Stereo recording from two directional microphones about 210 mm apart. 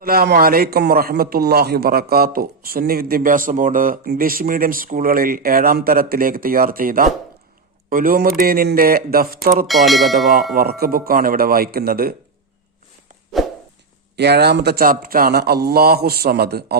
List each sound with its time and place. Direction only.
0.0 s a man's voice: 45° right (ahead or behind)
9.6 s speech: centre (ahead or behind)
10.5 s a man's voice: 45° right (ahead or behind)
14.2 s a man's voice: 50° right (ahead or behind)